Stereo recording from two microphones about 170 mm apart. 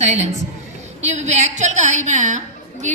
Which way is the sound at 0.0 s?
45° right (ahead or behind).